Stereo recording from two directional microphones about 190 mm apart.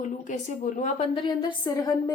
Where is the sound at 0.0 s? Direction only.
40° left (ahead or behind).